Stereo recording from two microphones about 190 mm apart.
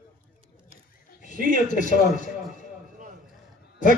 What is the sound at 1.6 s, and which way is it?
Speech, 40° left (ahead or behind).